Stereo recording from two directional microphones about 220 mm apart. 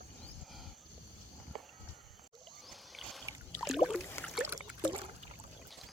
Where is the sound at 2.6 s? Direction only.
Centre (ahead or behind).